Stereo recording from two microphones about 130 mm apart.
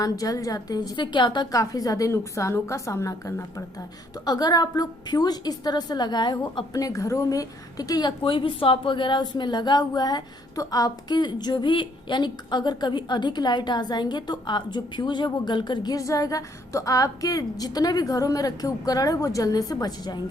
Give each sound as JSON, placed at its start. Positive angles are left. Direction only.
{"t": 0.0, "sound": "a woman's voice", "side_deg": 25}